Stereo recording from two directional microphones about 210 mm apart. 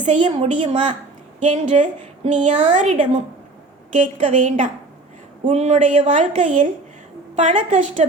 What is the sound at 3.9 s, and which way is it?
A woman's voice, 35° right (ahead or behind).